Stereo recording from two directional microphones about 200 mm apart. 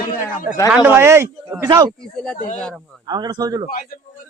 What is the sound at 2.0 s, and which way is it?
Speech, 5° left (ahead or behind).